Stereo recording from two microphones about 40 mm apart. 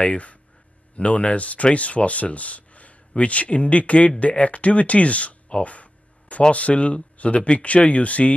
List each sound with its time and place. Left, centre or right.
0.0 s speech: left